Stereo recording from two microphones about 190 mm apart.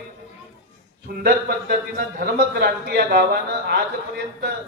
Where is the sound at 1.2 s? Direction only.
50° right (ahead or behind).